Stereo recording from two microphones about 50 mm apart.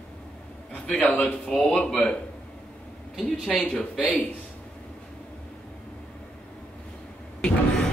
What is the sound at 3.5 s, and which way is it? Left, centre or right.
Speech, left.